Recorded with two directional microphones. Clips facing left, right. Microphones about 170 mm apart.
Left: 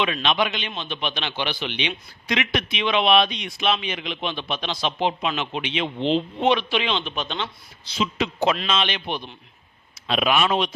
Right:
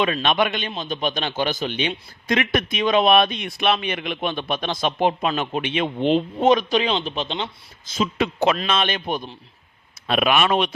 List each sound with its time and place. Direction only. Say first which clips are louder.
0.0 s speech: right 2 dB; 45° right (ahead or behind)
0.7 s speech: right 4 dB; 40° right (ahead or behind)
7.9 s speech: right 3 dB; 45° right (ahead or behind)
10.1 s speech: right 2 dB; 55° right (ahead or behind)